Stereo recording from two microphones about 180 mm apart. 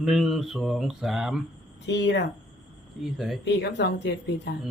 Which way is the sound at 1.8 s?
70° left (ahead or behind).